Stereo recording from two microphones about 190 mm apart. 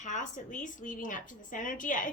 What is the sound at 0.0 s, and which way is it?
A woman's voice, 40° left (ahead or behind).